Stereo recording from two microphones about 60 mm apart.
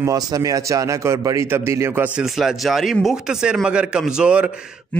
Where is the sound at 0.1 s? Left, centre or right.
Right.